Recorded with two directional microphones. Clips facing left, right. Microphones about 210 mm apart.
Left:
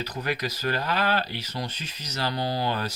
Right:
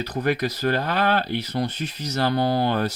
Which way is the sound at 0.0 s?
50° right (ahead or behind).